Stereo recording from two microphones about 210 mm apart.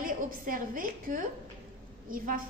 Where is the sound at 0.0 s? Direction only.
40° right (ahead or behind).